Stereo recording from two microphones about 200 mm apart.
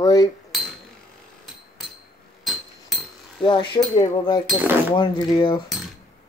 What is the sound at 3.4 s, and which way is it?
Speech, 25° left (ahead or behind).